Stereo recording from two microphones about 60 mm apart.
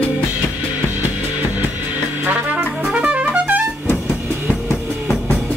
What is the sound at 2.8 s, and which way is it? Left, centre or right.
Trumpet, centre.